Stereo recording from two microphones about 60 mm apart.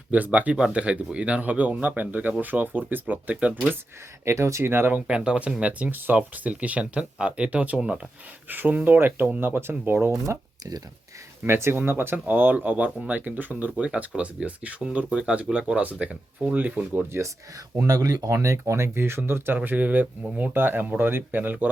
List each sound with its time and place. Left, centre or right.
0.1 s speech: right
4.3 s speech: right
4.7 s speech: right
5.0 s speech: centre
8.4 s speech: right
10.2 s speech: right
11.4 s speech: right
17.1 s speech: right
17.7 s speech: right